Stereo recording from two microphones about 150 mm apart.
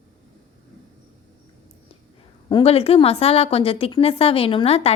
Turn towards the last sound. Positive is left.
turn(degrees=40)  # may be behind; listen again after turning